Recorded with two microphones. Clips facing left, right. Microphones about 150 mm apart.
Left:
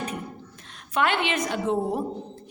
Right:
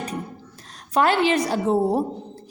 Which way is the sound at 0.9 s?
35° right (ahead or behind).